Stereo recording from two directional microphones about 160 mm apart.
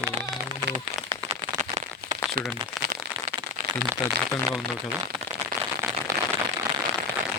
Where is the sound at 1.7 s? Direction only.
45° right (ahead or behind).